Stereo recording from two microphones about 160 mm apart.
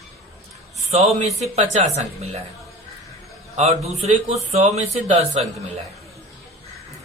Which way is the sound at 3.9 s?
40° right (ahead or behind).